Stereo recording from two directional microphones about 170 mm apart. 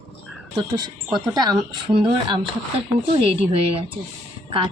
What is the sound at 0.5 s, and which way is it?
Speech, 25° right (ahead or behind).